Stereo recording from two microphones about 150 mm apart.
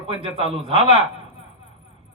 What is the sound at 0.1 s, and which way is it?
Speech, 40° right (ahead or behind).